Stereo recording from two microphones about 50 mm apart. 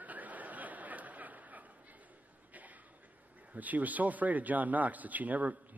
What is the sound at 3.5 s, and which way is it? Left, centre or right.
A man's voice, right.